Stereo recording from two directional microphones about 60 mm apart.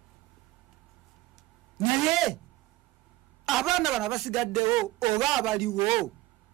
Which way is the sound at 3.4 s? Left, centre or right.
Centre.